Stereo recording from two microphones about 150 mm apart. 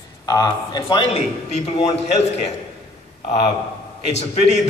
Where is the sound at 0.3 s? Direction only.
30° left (ahead or behind).